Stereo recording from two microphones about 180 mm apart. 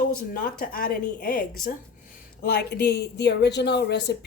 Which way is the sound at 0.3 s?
50° left (ahead or behind).